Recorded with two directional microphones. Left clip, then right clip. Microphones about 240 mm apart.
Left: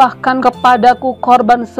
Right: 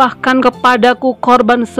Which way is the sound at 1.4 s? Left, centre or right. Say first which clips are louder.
Left 1 dB; right.